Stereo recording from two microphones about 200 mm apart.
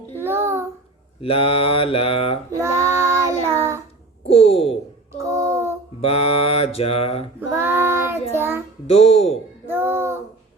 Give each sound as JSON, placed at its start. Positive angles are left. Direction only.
{"t": 0.2, "sound": "child singing", "side_deg": -10}
{"t": 1.2, "sound": "mantra", "side_deg": 30}
{"t": 2.6, "sound": "child singing", "side_deg": -15}
{"t": 4.3, "sound": "speech", "side_deg": 30}
{"t": 5.1, "sound": "child singing", "side_deg": -15}
{"t": 6.0, "sound": "mantra", "side_deg": 30}
{"t": 7.5, "sound": "child singing", "side_deg": -10}
{"t": 8.9, "sound": "music", "side_deg": 30}
{"t": 9.6, "sound": "a sound", "side_deg": -10}